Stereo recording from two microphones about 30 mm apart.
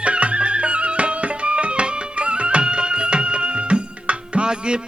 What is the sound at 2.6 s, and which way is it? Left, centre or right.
Music, right.